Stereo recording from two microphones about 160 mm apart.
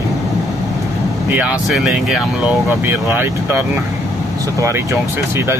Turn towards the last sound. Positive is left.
turn(degrees=-15)  # may be behind; listen again after turning